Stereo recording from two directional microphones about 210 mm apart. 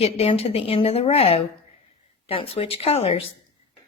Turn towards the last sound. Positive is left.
turn(degrees=30)  # may be behind; listen again after turning